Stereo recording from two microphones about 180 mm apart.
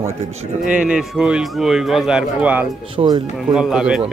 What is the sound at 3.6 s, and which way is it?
Speech, 5° right (ahead or behind).